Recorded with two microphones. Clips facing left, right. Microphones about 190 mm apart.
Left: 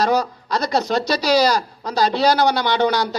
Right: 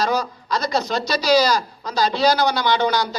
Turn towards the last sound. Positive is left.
turn(degrees=65)  # may be behind; listen again after turning